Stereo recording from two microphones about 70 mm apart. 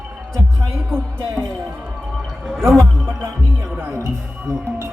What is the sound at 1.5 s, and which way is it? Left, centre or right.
Speech, right.